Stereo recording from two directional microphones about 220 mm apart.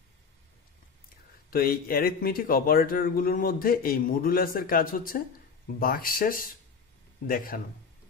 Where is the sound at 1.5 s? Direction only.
40° left (ahead or behind).